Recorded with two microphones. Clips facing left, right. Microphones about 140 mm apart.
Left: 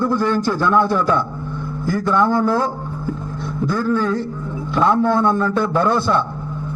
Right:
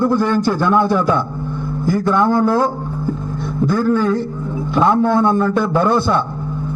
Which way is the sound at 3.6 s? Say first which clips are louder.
Right 3 dB; 15° right (ahead or behind).